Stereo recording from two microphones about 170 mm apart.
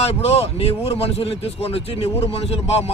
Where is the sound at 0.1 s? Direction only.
40° left (ahead or behind).